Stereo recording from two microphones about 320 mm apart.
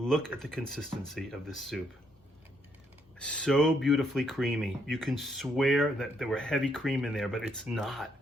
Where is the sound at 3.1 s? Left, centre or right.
Centre.